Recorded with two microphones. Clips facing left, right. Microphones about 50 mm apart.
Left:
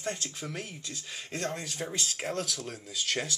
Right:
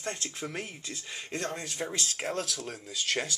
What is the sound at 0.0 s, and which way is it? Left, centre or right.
Speech, centre.